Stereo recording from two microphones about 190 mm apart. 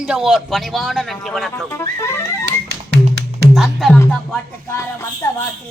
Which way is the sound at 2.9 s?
65° right (ahead or behind).